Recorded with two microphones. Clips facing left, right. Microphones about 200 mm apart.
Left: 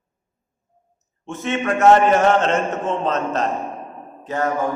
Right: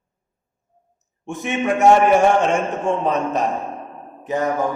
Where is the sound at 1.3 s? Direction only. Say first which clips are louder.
Right 1 dB; 15° right (ahead or behind).